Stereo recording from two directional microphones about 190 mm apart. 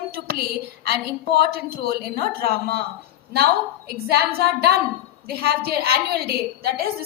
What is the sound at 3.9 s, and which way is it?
A woman's voice, 55° right (ahead or behind).